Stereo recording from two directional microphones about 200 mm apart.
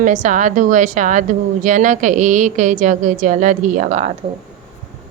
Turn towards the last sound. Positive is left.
turn(degrees=-35)  # may be behind; listen again after turning